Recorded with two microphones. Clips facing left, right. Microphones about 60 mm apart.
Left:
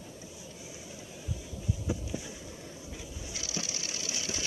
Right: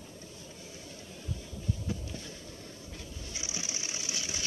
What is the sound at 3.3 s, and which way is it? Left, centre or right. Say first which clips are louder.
Sewing machine: left 2 dB; right.